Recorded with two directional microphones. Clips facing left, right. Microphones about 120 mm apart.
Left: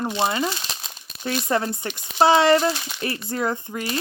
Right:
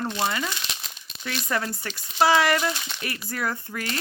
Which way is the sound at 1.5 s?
25° left (ahead or behind).